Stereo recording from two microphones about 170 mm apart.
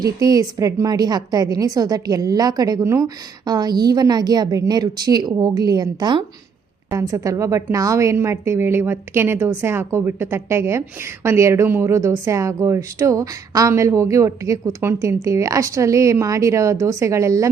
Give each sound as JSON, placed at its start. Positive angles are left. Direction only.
{"t": 0.0, "sound": "a woman's voice", "side_deg": -20}